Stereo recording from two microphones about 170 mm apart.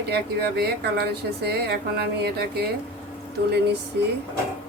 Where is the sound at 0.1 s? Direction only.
70° right (ahead or behind).